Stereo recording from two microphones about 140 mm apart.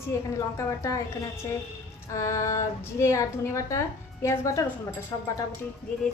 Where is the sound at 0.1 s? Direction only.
20° left (ahead or behind).